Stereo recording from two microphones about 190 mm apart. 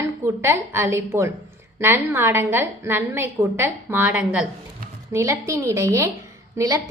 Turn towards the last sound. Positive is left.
turn(degrees=-15)  # may be behind; listen again after turning